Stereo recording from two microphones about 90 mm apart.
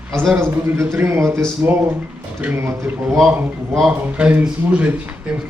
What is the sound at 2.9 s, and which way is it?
Speech, 10° right (ahead or behind).